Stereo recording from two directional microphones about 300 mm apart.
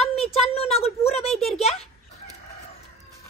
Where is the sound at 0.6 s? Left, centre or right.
Centre.